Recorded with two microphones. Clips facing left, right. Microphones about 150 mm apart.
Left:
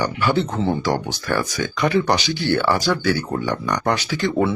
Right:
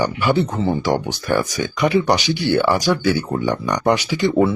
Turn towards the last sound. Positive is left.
turn(degrees=-15)  # may be behind; listen again after turning